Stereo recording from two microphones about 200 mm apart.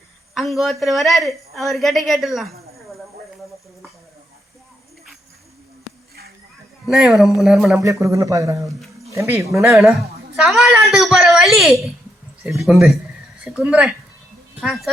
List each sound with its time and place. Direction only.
0.3 s a woman's voice: centre (ahead or behind)
2.7 s a sound: centre (ahead or behind)
6.8 s a woman's voice: centre (ahead or behind)
7.8 s speech: 15° right (ahead or behind)
9.6 s a woman's voice: centre (ahead or behind)